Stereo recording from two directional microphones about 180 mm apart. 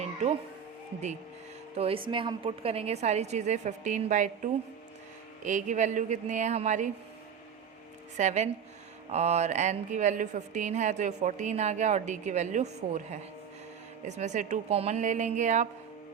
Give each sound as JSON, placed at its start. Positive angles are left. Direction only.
{"t": 1.7, "sound": "a woman's voice", "side_deg": -35}
{"t": 5.4, "sound": "a woman's voice", "side_deg": -45}
{"t": 8.1, "sound": "a woman's voice", "side_deg": -40}